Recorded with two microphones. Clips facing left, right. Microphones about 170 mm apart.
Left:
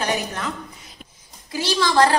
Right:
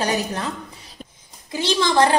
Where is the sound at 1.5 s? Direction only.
20° right (ahead or behind).